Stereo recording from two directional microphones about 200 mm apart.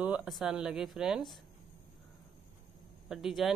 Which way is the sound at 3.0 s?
Centre (ahead or behind).